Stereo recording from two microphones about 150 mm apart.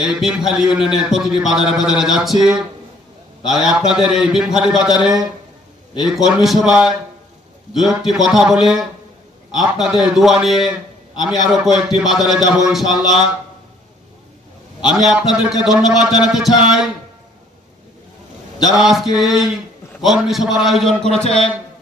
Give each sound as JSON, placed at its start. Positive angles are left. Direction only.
{"t": 0.0, "sound": "speech", "side_deg": -5}
{"t": 14.8, "sound": "speech", "side_deg": -5}
{"t": 18.8, "sound": "speech", "side_deg": 0}
{"t": 21.2, "sound": "speech", "side_deg": 40}